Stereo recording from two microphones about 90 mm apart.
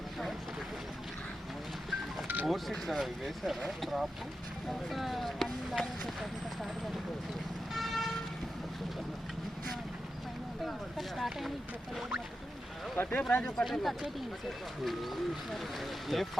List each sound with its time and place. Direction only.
2.2 s music: 20° right (ahead or behind)
2.5 s speech: centre (ahead or behind)
7.7 s vehicle: centre (ahead or behind)
10.7 s speech: centre (ahead or behind)
13.0 s speech: 20° left (ahead or behind)
13.6 s speech: 5° left (ahead or behind)